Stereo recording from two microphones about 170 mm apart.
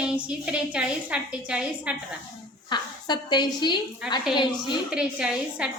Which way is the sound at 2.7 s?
25° left (ahead or behind).